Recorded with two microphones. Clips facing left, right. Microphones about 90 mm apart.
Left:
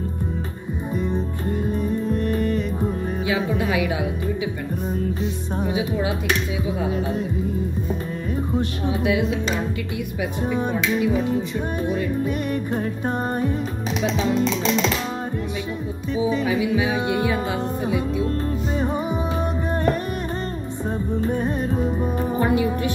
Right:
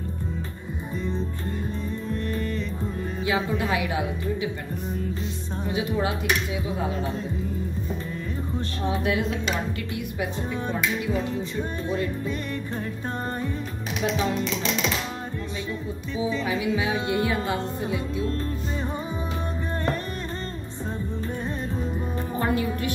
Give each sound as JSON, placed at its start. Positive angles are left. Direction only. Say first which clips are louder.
{"t": 1.7, "sound": "music", "louder": "left 7 dB", "side_deg": 20}
{"t": 5.6, "sound": "music", "louder": "left 2 dB", "side_deg": 20}
{"t": 8.5, "sound": "music", "louder": "left 2 dB", "side_deg": 15}
{"t": 10.5, "sound": "music", "louder": "left 7 dB", "side_deg": 15}
{"t": 16.3, "sound": "music", "louder": "left 4 dB", "side_deg": 20}
{"t": 21.3, "sound": "music", "louder": "left 7 dB", "side_deg": 55}
{"t": 22.4, "sound": "speech", "louder": "left 4 dB", "side_deg": 20}